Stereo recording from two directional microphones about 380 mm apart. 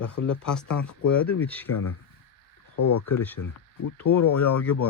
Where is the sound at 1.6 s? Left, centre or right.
Left.